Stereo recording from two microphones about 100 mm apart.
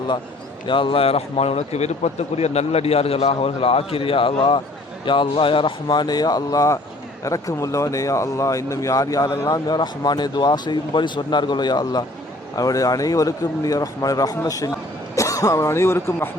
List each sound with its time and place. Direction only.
0.7 s a man's voice: 55° left (ahead or behind); by 16.1 s 25° left (ahead or behind)